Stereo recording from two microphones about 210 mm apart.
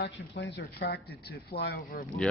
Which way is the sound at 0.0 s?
55° left (ahead or behind).